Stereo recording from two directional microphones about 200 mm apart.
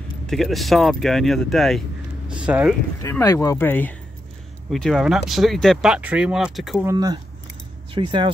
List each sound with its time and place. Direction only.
0.3 s speech: centre (ahead or behind)
3.0 s speech: 15° left (ahead or behind); by 6.9 s centre (ahead or behind)
6.9 s speech: 20° right (ahead or behind)